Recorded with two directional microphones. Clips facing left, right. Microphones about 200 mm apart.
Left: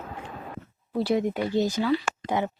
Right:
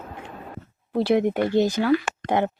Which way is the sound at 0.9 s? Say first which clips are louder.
Right 4 dB; 65° right (ahead or behind).